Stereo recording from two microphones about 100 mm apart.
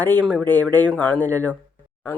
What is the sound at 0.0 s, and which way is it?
Speech, 15° left (ahead or behind).